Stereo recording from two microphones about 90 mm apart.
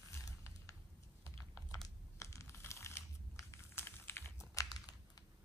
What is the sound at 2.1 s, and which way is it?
Crumpling, 35° left (ahead or behind).